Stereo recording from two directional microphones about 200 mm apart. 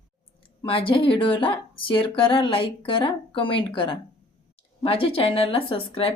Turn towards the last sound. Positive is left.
turn(degrees=30)  # may be behind; listen again after turning